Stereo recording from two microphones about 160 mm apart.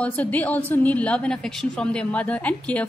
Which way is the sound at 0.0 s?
10° left (ahead or behind).